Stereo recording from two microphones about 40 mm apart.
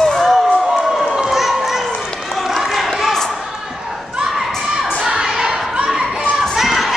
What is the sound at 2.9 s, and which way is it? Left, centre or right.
Basketball bounce, centre.